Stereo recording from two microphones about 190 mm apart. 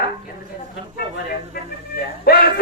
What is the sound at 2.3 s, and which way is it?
Speech, 55° left (ahead or behind).